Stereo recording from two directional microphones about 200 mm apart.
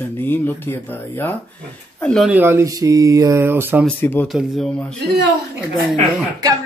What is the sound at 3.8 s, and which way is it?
Speech, 10° left (ahead or behind).